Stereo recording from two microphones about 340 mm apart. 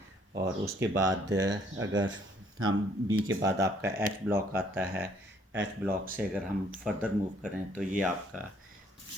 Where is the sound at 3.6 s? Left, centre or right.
Centre.